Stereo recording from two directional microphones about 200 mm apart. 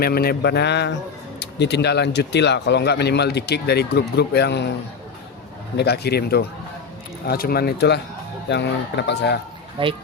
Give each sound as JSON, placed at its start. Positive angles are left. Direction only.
{"t": 0.0, "sound": "speech", "side_deg": 50}
{"t": 5.7, "sound": "speech", "side_deg": 55}
{"t": 9.8, "sound": "speech", "side_deg": -25}